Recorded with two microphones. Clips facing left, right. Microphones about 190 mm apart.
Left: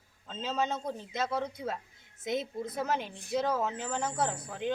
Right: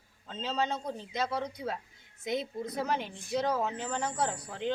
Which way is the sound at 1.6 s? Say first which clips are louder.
Even; centre (ahead or behind).